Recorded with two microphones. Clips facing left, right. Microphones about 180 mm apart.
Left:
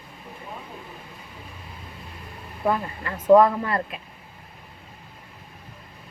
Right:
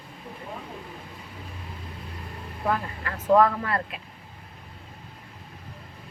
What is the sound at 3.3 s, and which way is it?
Speech, 20° left (ahead or behind).